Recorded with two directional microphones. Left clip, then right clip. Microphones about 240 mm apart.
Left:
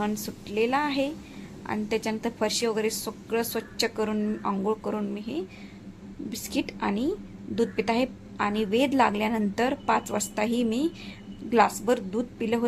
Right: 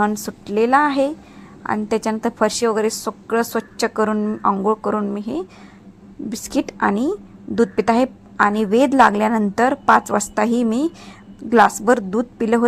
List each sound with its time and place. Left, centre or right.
0.0 s a woman's voice: centre